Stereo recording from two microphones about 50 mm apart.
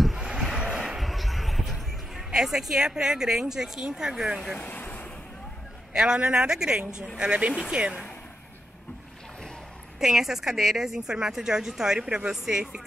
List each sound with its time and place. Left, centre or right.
0.2 s a sound: centre
0.6 s basketball bounce: centre
2.3 s a woman's voice: centre
4.6 s vehicle: left
5.9 s a woman's voice: centre
9.9 s a woman's voice: centre